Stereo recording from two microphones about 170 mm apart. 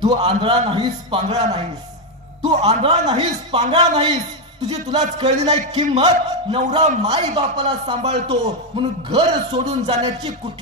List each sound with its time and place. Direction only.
0.0 s a man's voice: 25° right (ahead or behind)
2.6 s a man's voice: 25° right (ahead or behind)
6.0 s a man's voice: 25° right (ahead or behind)
6.8 s a man's voice: 40° right (ahead or behind)
7.3 s a man's voice: 30° right (ahead or behind)